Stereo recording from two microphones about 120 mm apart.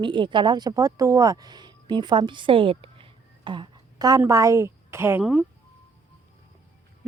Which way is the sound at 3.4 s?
40° right (ahead or behind).